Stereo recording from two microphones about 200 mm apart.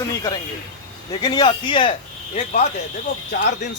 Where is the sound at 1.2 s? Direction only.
20° left (ahead or behind).